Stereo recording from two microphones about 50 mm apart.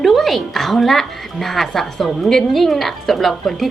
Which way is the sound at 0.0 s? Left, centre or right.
Centre.